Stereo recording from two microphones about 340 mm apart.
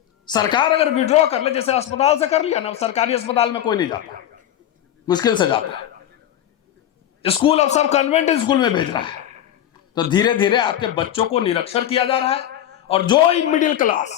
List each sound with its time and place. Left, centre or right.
0.3 s a man's voice: centre
5.0 s a man's voice: centre
7.2 s a man's voice: centre